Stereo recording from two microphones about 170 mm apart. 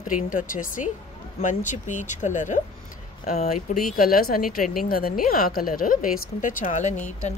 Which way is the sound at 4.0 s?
60° left (ahead or behind).